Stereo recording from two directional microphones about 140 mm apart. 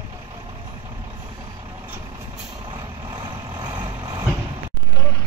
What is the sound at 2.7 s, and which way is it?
Vehicle, 30° right (ahead or behind).